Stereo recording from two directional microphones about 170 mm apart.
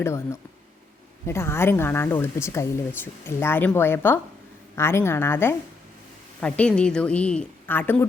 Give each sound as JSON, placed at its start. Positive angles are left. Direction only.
{"t": 0.0, "sound": "speech", "side_deg": 15}